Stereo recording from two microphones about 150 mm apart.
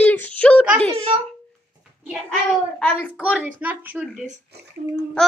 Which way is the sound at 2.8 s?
10° left (ahead or behind).